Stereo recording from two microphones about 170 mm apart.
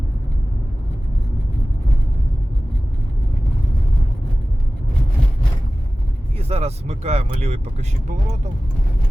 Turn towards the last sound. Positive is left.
turn(degrees=-40)  # may be behind; listen again after turning